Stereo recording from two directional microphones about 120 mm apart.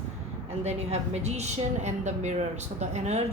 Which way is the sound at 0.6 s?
65° right (ahead or behind).